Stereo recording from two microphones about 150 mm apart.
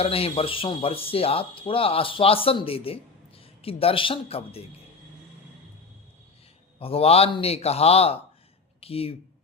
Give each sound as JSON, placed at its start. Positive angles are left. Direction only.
{"t": 0.0, "sound": "speech", "side_deg": 40}
{"t": 6.7, "sound": "a man's voice", "side_deg": 40}